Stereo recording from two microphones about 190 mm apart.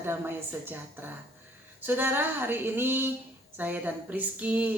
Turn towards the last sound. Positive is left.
turn(degrees=-10)  # may be behind; listen again after turning